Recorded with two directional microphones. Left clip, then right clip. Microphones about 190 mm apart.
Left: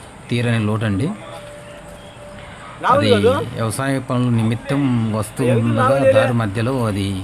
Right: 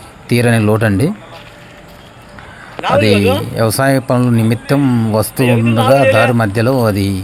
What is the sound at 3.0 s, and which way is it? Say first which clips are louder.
Speech: right 3 dB; 35° right (ahead or behind).